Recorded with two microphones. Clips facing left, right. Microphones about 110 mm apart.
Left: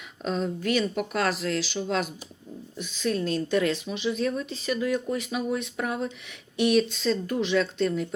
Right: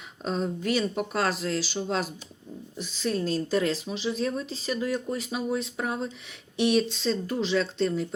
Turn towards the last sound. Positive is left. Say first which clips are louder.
# left 1 dB
turn(degrees=-35)  # may be behind; listen again after turning